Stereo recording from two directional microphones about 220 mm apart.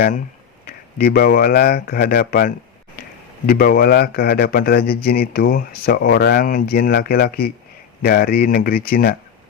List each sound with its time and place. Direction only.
0.7 s speech: 45° left (ahead or behind)